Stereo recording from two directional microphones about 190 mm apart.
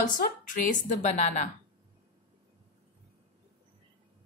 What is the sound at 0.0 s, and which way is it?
A woman's voice, 45° left (ahead or behind).